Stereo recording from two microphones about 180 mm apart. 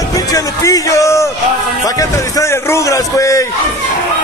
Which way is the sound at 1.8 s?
20° left (ahead or behind).